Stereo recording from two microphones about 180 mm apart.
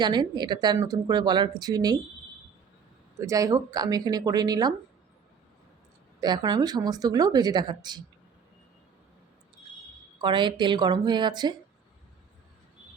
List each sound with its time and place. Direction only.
0.0 s speech: 25° right (ahead or behind)
3.2 s speech: 15° right (ahead or behind)
6.1 s speech: 20° right (ahead or behind)
10.2 s speech: 25° right (ahead or behind)